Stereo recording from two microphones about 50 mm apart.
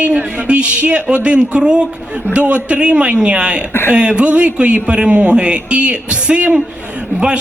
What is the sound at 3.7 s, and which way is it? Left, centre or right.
Speech, left.